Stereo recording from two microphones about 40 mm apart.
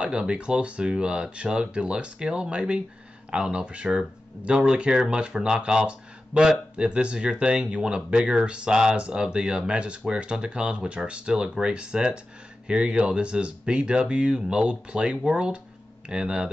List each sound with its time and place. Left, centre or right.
0.0 s speech: right